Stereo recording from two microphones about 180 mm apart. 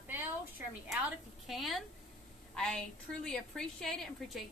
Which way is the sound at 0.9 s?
Centre (ahead or behind).